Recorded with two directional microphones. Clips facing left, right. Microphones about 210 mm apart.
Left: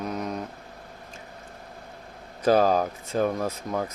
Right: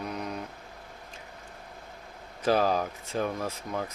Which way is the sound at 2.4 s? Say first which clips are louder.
Left 5 dB; 45° left (ahead or behind).